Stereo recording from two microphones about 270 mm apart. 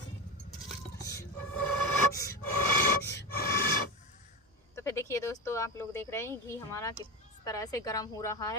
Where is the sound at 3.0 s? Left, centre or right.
Left.